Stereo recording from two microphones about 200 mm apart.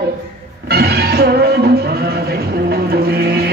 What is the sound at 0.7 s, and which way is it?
Music, 50° right (ahead or behind).